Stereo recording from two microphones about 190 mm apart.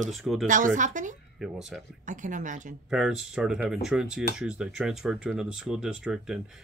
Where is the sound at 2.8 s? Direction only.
5° right (ahead or behind).